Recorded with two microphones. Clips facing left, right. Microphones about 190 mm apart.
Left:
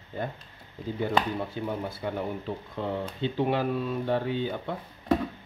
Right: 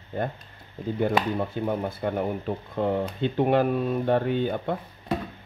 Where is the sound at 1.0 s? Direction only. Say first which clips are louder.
Right 3 dB; 55° right (ahead or behind).